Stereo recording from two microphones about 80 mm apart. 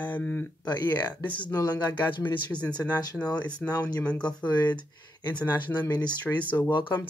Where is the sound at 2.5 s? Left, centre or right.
Centre.